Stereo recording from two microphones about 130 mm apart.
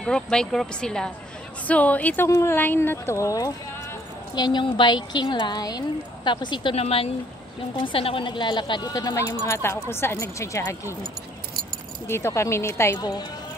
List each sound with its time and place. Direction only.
0.0 s speech: 5° left (ahead or behind); by 3.5 s 25° left (ahead or behind)
4.4 s a woman's voice: 35° left (ahead or behind)
12.1 s speech: 20° left (ahead or behind)